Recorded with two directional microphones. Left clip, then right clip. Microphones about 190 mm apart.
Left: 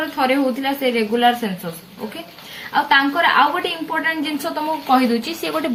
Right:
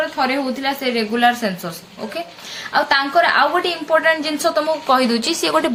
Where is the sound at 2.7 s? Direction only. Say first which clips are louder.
Left 1 dB; 15° right (ahead or behind).